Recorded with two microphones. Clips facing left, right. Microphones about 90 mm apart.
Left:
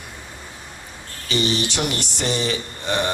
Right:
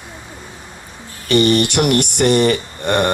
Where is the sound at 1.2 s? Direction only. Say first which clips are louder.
Right 9 dB; 60° right (ahead or behind).